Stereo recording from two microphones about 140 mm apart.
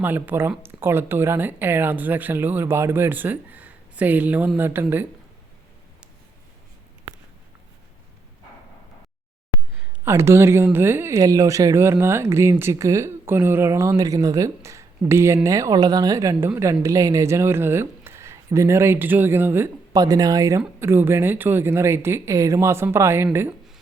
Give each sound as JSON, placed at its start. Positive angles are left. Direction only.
{"t": 0.0, "sound": "speech", "side_deg": -15}
{"t": 10.0, "sound": "speech", "side_deg": -20}
{"t": 19.9, "sound": "speech", "side_deg": -25}